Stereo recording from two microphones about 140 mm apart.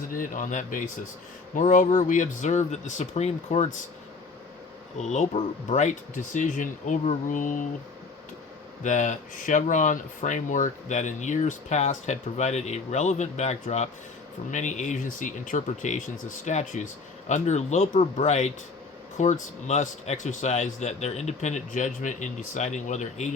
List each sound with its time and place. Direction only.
0.1 s speech: 70° left (ahead or behind); by 3.7 s 55° left (ahead or behind)
4.9 s speech: 55° left (ahead or behind)
7.3 s speech: 70° left (ahead or behind)
8.8 s speech: 65° left (ahead or behind)